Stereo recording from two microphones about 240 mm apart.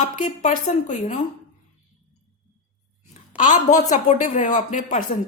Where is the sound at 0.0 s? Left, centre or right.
Left.